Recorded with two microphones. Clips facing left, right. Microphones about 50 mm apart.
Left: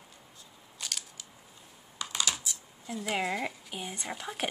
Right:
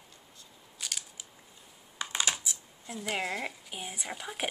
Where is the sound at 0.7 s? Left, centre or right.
Centre.